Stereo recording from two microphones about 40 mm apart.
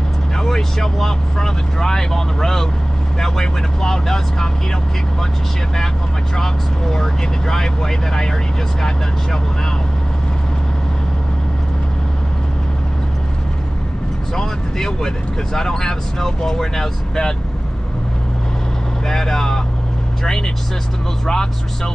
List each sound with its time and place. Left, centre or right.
0.4 s speech: centre
6.3 s speech: centre
14.3 s speech: centre
19.0 s speech: centre